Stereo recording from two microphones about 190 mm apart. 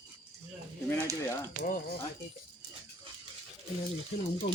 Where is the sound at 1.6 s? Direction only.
45° left (ahead or behind).